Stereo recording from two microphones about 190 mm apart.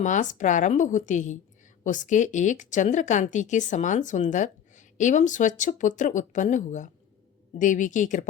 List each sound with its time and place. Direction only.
0.0 s speech: 40° left (ahead or behind)